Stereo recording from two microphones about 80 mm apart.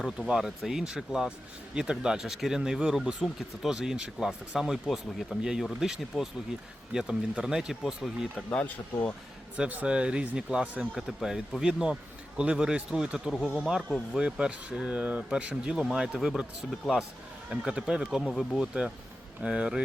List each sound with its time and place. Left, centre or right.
0.3 s speech: centre
8.4 s speech: centre
9.6 s speech: centre
18.0 s speech: centre